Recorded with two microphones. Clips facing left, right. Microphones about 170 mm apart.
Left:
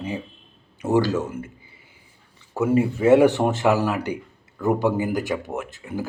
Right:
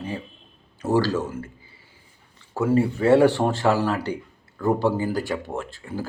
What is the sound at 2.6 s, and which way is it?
A man's voice, 15° left (ahead or behind).